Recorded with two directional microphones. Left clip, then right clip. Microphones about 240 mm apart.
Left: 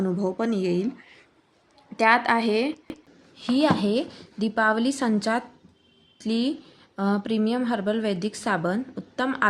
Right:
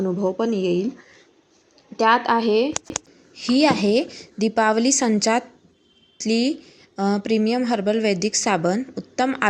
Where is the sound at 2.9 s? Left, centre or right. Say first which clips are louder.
Right 10 dB; centre.